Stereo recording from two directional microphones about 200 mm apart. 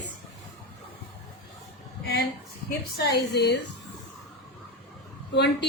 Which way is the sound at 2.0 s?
55° left (ahead or behind).